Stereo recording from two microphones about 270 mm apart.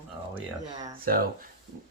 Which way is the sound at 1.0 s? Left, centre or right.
Right.